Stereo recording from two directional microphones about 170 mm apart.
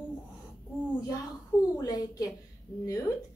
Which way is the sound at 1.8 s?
20° left (ahead or behind).